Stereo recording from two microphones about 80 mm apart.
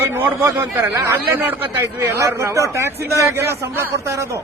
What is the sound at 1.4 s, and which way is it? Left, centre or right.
A man's voice, right.